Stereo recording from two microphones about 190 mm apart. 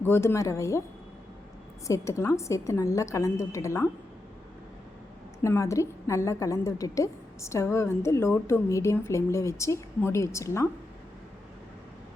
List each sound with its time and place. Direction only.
0.0 s a woman's voice: 10° left (ahead or behind)
1.9 s a woman's voice: 15° left (ahead or behind)
5.4 s a woman's voice: 15° left (ahead or behind)